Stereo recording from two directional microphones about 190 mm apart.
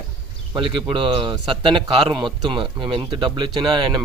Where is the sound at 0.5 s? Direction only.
25° right (ahead or behind).